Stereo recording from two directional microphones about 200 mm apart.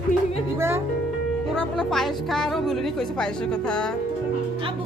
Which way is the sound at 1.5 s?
5° left (ahead or behind).